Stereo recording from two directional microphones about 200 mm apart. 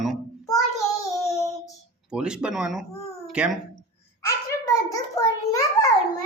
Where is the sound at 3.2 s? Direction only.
5° right (ahead or behind).